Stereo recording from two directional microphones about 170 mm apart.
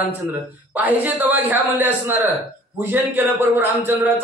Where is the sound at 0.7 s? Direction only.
10° right (ahead or behind).